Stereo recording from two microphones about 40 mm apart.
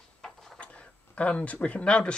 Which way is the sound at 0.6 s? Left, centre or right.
Left.